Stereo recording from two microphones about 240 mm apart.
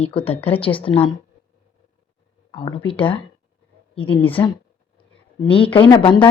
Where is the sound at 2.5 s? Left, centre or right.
Left.